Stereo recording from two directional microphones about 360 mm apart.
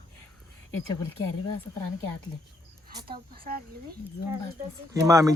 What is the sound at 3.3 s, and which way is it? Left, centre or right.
Speech, right.